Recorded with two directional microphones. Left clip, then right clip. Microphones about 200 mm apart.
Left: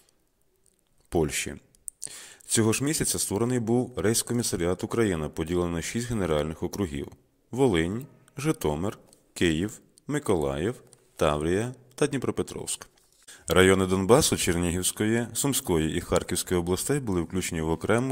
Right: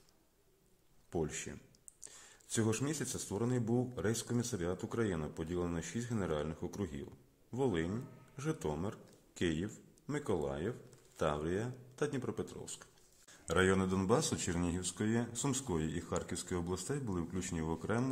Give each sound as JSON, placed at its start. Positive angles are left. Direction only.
{"t": 1.1, "sound": "speech", "side_deg": 45}